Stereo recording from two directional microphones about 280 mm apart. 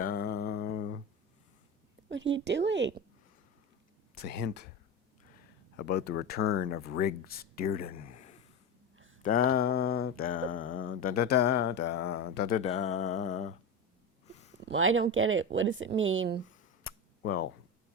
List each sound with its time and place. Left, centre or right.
0.0 s a sound: left
2.0 s speech: right
4.2 s mantra: left
5.7 s speech: left
6.5 s mantra: left
14.6 s speech: right
16.8 s cap gun: left